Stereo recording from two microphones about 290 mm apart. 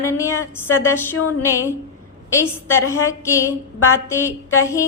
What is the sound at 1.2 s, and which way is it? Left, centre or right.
Music, left.